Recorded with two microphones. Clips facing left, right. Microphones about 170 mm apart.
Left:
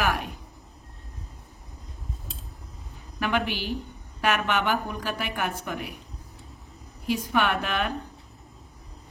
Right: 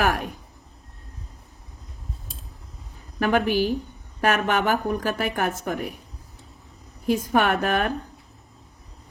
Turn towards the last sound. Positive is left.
turn(degrees=-45)  # may be behind; listen again after turning